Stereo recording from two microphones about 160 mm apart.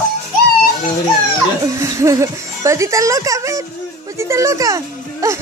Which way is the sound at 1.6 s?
20° right (ahead or behind).